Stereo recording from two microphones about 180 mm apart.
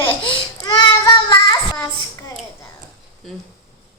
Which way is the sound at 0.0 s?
25° left (ahead or behind).